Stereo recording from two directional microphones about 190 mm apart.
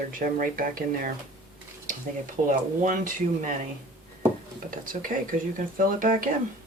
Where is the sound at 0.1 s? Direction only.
45° right (ahead or behind).